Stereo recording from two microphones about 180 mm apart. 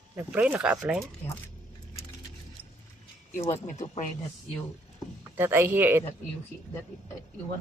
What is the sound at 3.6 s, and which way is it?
Speech, 40° left (ahead or behind).